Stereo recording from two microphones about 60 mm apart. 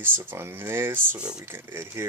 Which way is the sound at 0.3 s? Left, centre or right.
Right.